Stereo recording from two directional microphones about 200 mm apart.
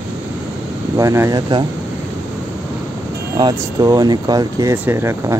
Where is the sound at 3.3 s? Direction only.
20° right (ahead or behind).